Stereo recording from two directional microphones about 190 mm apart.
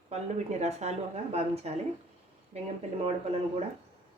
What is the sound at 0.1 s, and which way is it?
Speech, 35° right (ahead or behind).